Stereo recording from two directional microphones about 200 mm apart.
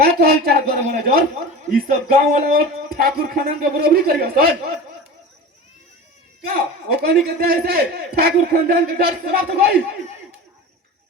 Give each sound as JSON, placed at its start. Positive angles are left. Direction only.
{"t": 0.0, "sound": "speech", "side_deg": -50}
{"t": 6.4, "sound": "speech", "side_deg": -50}